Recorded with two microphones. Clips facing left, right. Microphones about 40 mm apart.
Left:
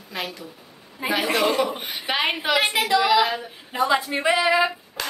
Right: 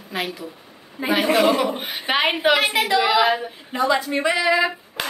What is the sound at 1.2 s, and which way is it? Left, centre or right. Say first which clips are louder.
Speech: right 5 dB; right.